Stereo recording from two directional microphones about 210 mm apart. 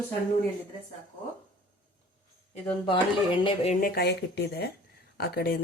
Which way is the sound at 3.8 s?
50° left (ahead or behind).